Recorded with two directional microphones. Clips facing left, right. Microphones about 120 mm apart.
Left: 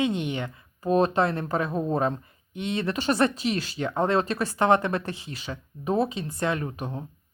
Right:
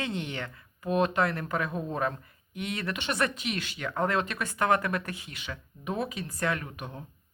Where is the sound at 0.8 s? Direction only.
35° left (ahead or behind).